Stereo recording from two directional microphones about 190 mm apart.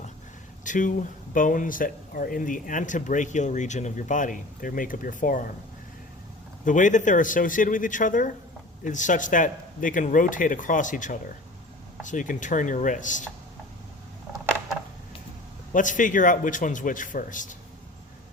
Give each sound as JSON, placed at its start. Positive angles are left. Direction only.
{"t": 0.6, "sound": "speech", "side_deg": 40}
{"t": 6.7, "sound": "speech", "side_deg": 40}
{"t": 15.7, "sound": "speech", "side_deg": 40}